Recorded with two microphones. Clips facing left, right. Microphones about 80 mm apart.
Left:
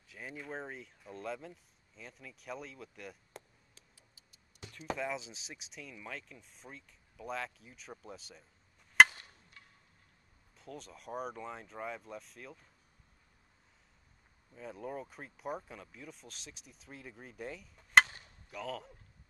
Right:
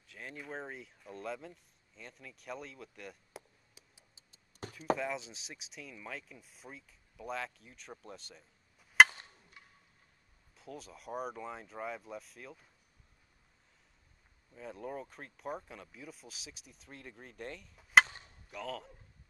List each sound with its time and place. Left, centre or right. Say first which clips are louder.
0.1 s speech: left 1 dB; centre
3.7 s a sound: right 1 dB; right
4.6 s a sound: right 7 dB; right
4.9 s speech: right 1 dB; centre
9.0 s chop: even; centre
10.5 s speech: even; centre
14.5 s speech: even; centre